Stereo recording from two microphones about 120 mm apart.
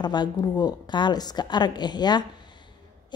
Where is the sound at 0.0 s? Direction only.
35° left (ahead or behind).